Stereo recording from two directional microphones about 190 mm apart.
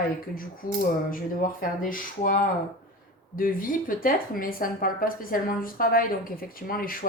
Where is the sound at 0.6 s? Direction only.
45° left (ahead or behind).